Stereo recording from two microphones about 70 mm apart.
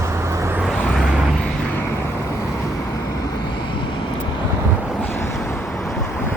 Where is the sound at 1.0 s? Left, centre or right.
Centre.